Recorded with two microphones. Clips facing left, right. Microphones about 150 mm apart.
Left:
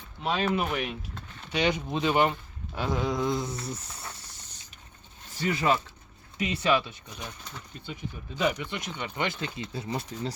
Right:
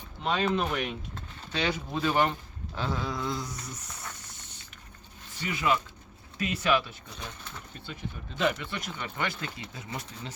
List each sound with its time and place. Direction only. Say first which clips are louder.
0.2 s speech: even; 5° left (ahead or behind)
1.5 s speech: left 3 dB; 20° left (ahead or behind)
5.4 s speech: left 3 dB; 40° left (ahead or behind)
6.3 s speech: left 1 dB; 25° left (ahead or behind)
8.4 s speech: left 1 dB; 15° left (ahead or behind); by 10.3 s 30° left (ahead or behind)